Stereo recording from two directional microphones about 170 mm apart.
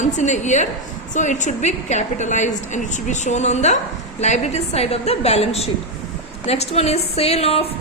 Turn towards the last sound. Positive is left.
turn(degrees=35)  # may be behind; listen again after turning